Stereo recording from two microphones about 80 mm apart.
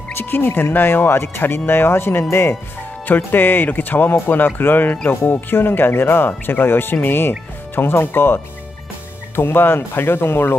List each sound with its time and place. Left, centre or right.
0.1 s speech: left